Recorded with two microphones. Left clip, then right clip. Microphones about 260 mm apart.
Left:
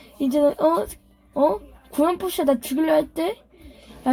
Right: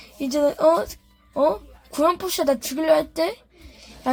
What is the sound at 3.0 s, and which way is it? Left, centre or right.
Speech, centre.